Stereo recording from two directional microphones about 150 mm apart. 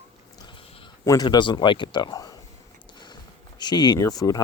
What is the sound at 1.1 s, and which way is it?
Speech, 25° left (ahead or behind).